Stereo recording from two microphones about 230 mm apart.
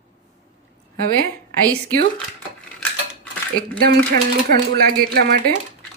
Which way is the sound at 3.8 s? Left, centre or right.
Right.